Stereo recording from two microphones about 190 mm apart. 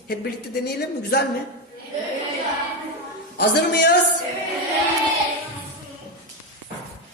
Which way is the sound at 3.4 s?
65° left (ahead or behind).